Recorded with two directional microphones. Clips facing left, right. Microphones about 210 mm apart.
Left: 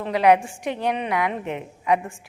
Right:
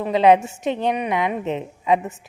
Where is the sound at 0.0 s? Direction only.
25° right (ahead or behind).